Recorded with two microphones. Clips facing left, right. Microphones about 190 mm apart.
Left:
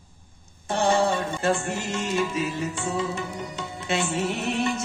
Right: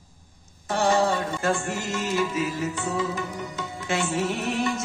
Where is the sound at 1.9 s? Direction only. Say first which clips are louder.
Right 1 dB; 25° left (ahead or behind).